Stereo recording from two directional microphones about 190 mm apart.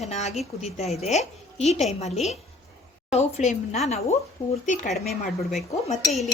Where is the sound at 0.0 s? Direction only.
35° left (ahead or behind).